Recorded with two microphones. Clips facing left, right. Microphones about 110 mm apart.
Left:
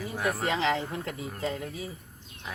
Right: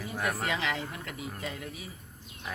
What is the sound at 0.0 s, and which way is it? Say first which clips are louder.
Speech: left 2 dB; 10° left (ahead or behind).